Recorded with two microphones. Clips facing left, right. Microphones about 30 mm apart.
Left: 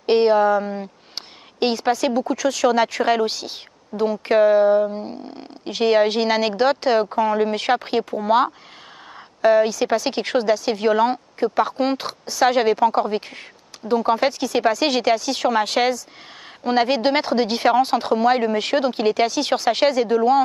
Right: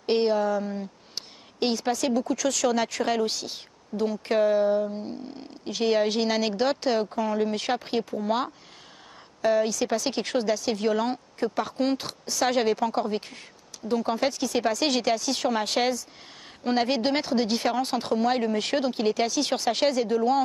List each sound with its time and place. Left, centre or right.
0.0 s speech: left
16.7 s speech: left